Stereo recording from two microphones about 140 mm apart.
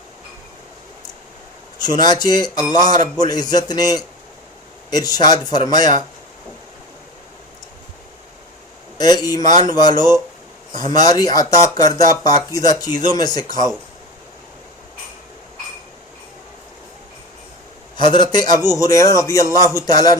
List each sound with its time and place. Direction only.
1.8 s speech: 30° left (ahead or behind)
9.0 s speech: 30° left (ahead or behind)
17.9 s speech: 35° left (ahead or behind)